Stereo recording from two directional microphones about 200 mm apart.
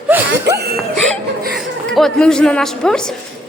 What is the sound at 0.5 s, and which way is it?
Laughter, 55° right (ahead or behind).